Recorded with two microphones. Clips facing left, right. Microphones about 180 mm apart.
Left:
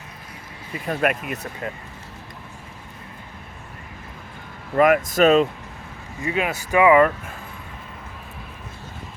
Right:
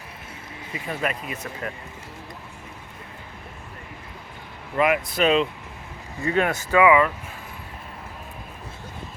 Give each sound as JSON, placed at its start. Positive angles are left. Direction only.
{"t": 0.7, "sound": "speech", "side_deg": 55}
{"t": 1.6, "sound": "speech", "side_deg": 20}
{"t": 4.8, "sound": "speech", "side_deg": 45}
{"t": 6.2, "sound": "speech", "side_deg": 10}